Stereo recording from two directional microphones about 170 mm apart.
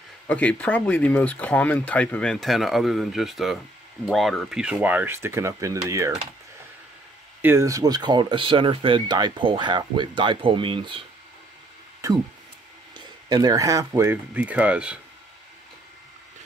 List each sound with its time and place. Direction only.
0.3 s speech: 10° left (ahead or behind); by 6.1 s 20° right (ahead or behind)
7.4 s speech: 15° right (ahead or behind)
12.0 s speech: 20° right (ahead or behind)